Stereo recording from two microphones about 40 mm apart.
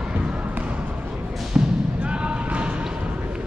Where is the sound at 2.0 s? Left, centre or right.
Right.